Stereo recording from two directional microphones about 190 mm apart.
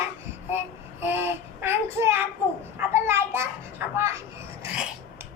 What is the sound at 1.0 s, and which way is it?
A child's voice, 10° right (ahead or behind).